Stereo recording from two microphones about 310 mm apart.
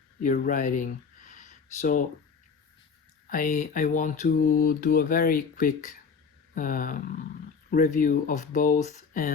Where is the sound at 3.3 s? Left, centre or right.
Left.